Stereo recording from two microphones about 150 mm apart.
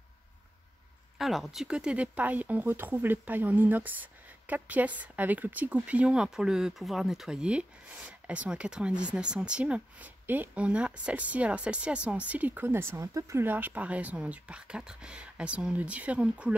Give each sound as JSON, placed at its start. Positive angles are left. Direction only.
{"t": 1.1, "sound": "speech", "side_deg": 0}